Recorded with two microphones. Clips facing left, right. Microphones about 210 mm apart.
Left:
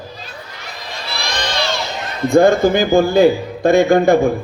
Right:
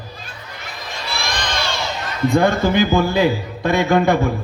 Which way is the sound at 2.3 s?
50° left (ahead or behind).